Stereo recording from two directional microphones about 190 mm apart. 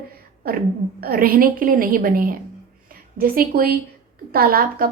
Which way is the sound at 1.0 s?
50° right (ahead or behind).